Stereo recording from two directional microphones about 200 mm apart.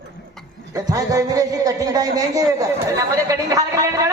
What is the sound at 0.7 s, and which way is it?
A man's voice, 20° right (ahead or behind).